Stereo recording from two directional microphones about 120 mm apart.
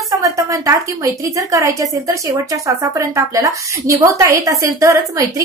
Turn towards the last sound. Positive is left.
turn(degrees=-25)  # may be behind; listen again after turning